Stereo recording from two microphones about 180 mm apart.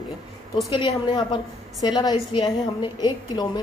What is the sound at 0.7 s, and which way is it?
A woman's voice, 30° left (ahead or behind).